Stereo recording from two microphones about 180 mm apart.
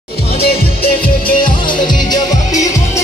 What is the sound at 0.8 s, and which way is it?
Music, 50° left (ahead or behind).